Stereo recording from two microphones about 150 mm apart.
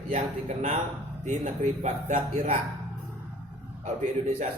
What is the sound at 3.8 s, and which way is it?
Speech, 50° right (ahead or behind).